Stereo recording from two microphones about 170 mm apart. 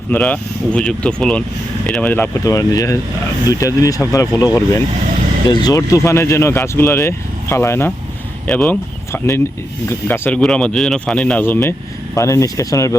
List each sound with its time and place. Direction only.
0.1 s speech: 10° left (ahead or behind)